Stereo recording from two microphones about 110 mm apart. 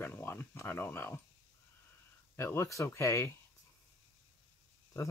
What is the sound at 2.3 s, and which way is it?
Speech, 20° left (ahead or behind).